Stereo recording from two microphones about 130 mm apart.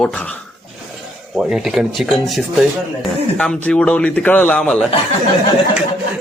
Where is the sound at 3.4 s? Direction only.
10° left (ahead or behind).